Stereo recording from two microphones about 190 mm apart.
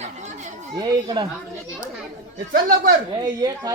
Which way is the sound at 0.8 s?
20° right (ahead or behind).